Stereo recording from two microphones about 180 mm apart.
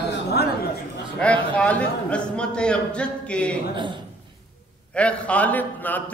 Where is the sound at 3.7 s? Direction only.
25° right (ahead or behind).